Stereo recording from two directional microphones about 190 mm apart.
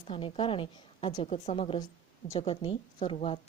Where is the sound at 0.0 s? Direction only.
30° left (ahead or behind).